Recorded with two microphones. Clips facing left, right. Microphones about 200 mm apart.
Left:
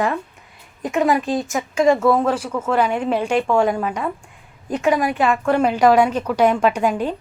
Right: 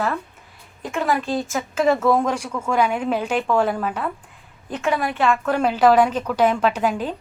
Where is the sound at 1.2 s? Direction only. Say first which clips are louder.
Left 2 dB; centre (ahead or behind).